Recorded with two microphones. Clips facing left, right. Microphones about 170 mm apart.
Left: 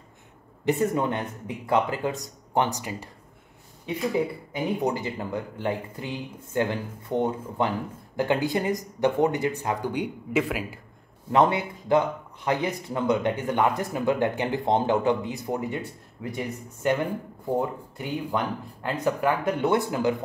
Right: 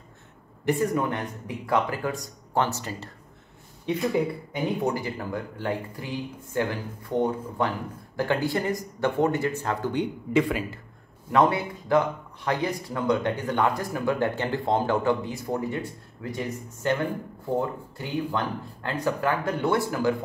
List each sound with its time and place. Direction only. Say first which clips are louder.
0.7 s speech: left 1 dB; 25° left (ahead or behind)
4.8 s speech: even; 20° left (ahead or behind)
11.3 s speech: even; 20° left (ahead or behind)